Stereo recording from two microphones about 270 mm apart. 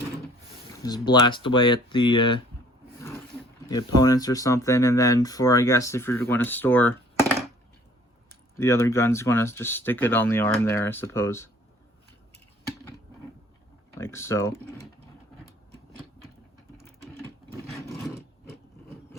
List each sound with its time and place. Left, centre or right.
0.8 s speech: centre
3.7 s speech: centre
8.5 s speech: centre
14.0 s speech: centre